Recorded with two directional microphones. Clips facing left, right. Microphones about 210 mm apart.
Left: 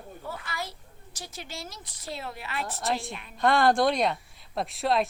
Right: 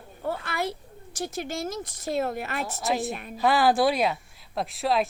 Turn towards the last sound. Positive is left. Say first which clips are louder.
# right 1 dB
turn(degrees=0)  # may be behind; listen again after turning